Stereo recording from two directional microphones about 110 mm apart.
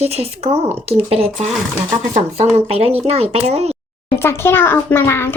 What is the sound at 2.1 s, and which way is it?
Speech, 80° right.